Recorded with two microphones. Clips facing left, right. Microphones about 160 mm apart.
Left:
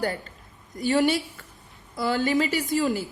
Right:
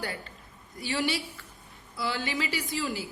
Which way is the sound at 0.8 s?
45° left (ahead or behind).